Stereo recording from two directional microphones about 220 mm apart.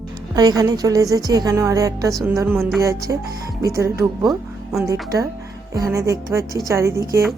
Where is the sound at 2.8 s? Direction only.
15° right (ahead or behind).